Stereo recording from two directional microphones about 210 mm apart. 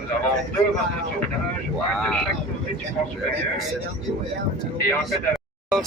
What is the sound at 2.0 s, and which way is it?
Speech, 5° left (ahead or behind).